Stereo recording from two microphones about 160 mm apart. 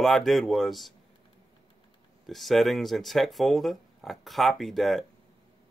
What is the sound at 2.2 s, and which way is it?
Speech, centre (ahead or behind).